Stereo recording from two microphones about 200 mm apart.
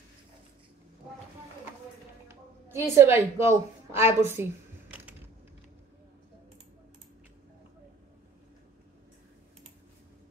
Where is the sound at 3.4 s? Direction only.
10° right (ahead or behind).